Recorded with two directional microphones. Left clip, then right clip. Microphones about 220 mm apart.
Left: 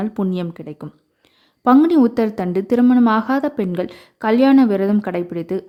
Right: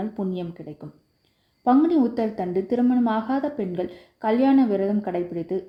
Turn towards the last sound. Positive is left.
turn(degrees=30)  # may be behind; listen again after turning